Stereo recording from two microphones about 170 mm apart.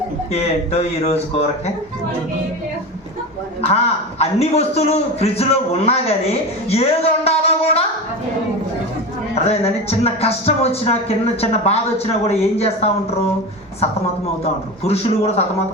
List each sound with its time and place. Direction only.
0.3 s a man's voice: 35° left (ahead or behind)
4.2 s a man's voice: 40° left (ahead or behind)
9.3 s a man's voice: 35° left (ahead or behind)
14.8 s a man's voice: 35° left (ahead or behind)